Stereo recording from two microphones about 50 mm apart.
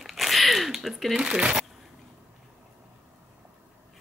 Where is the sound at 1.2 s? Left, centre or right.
Centre.